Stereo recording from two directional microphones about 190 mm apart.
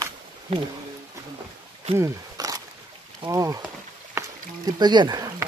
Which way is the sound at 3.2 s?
15° right (ahead or behind).